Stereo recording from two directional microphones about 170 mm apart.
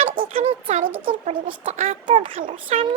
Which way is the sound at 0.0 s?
35° right (ahead or behind).